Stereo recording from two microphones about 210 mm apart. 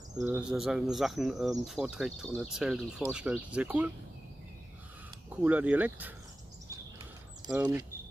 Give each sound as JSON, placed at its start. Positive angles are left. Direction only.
{"t": 0.2, "sound": "speech", "side_deg": -5}
{"t": 5.3, "sound": "speech", "side_deg": -5}
{"t": 7.4, "sound": "speech", "side_deg": -20}